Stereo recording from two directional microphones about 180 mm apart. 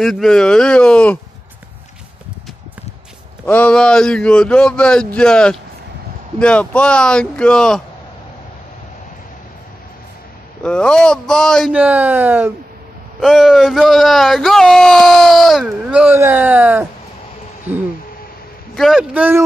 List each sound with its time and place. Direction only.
0.0 s speech: centre (ahead or behind)
3.4 s speech: 10° left (ahead or behind)
10.6 s speech: 5° left (ahead or behind)
11.7 s speech: 10° right (ahead or behind)
18.8 s speech: centre (ahead or behind)